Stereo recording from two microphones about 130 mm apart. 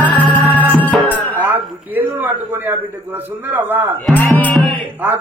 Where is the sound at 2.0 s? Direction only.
15° right (ahead or behind).